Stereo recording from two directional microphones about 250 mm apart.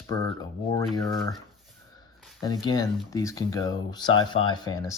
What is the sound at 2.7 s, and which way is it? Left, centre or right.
Speech, centre.